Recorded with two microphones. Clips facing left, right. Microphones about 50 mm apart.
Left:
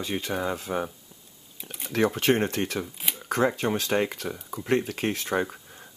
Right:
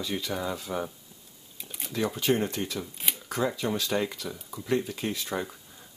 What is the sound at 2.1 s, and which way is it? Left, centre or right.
Speech, left.